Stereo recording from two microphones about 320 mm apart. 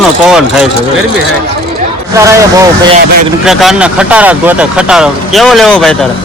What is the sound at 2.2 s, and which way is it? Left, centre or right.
Speech, centre.